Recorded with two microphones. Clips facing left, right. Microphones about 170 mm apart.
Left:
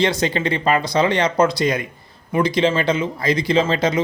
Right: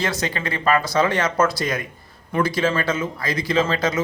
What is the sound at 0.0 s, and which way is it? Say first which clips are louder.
Speech: left 6 dB; 20° left (ahead or behind).